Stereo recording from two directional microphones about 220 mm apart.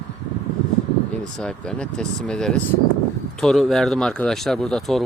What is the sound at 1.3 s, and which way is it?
Speech, 5° left (ahead or behind).